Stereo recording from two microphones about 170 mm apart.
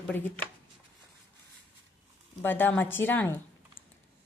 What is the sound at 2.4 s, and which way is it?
Speech, 10° left (ahead or behind).